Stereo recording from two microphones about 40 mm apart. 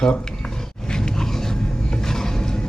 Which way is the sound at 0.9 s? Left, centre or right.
Centre.